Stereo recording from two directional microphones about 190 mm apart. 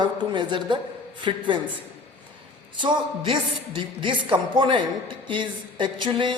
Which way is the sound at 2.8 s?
25° right (ahead or behind).